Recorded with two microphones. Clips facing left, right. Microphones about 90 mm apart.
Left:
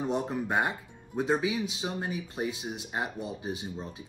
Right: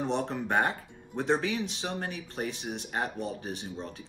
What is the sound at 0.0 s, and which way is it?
Speech, 10° left (ahead or behind).